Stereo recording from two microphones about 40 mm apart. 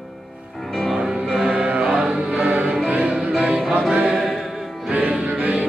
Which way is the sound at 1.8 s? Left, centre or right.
Centre.